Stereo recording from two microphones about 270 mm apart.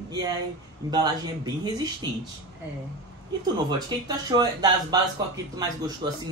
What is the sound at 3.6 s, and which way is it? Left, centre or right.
A man's voice, centre.